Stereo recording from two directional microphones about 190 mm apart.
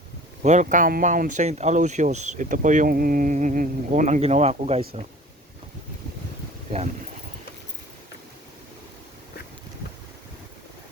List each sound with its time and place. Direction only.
0.4 s speech: 40° right (ahead or behind)